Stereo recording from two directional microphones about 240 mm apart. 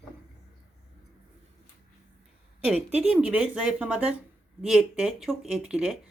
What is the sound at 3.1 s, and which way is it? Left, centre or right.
Speech, centre.